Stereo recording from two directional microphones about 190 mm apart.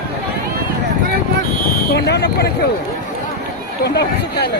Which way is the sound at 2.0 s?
60° left (ahead or behind).